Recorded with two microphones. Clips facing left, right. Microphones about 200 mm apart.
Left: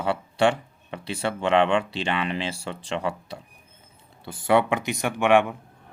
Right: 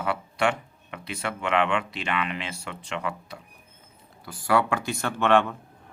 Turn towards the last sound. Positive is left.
turn(degrees=15)  # may be behind; listen again after turning